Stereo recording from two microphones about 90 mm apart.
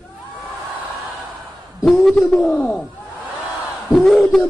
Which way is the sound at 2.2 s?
5° left (ahead or behind).